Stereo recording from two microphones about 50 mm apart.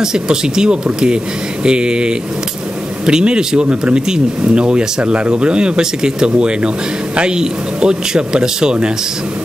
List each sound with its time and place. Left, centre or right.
0.0 s speech: centre